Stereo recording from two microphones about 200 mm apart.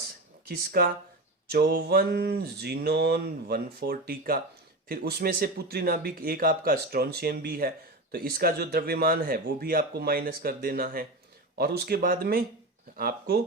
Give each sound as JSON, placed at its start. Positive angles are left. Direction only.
{"t": 0.4, "sound": "speech", "side_deg": -45}